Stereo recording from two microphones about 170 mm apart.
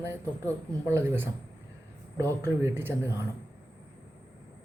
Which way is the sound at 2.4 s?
15° right (ahead or behind).